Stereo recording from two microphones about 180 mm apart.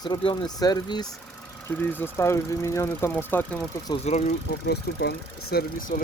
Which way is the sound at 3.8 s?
35° left (ahead or behind).